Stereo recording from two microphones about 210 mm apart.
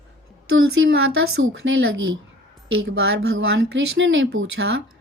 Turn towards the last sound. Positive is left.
turn(degrees=-65)  # may be behind; listen again after turning